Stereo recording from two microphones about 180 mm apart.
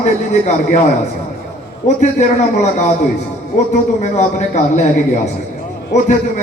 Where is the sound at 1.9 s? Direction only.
40° left (ahead or behind).